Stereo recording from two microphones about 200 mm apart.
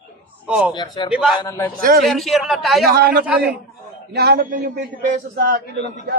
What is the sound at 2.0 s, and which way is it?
Speech, centre (ahead or behind).